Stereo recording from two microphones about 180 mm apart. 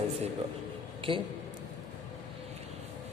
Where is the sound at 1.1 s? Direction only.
30° right (ahead or behind).